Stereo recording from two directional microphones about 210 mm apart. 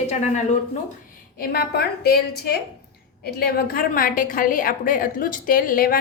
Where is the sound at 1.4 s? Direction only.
50° left (ahead or behind).